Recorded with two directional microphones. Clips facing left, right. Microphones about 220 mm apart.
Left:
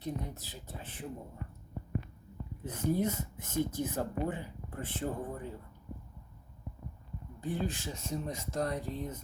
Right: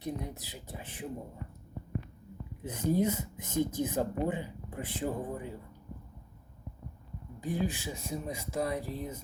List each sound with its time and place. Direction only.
0.0 s speech: 15° right (ahead or behind)
2.6 s speech: 15° right (ahead or behind)
7.4 s speech: 10° right (ahead or behind)